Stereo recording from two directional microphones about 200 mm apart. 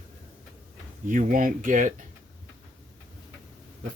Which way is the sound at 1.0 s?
45° right (ahead or behind).